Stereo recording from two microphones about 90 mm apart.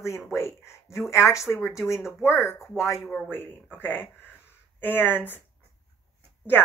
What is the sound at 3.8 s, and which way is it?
Speech, 25° left (ahead or behind).